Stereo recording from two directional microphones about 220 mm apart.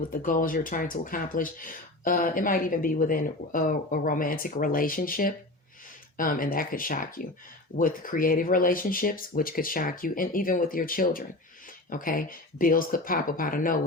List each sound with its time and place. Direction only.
0.1 s speech: 40° left (ahead or behind)